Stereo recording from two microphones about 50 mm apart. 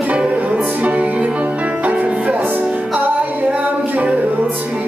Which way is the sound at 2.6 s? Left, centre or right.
Right.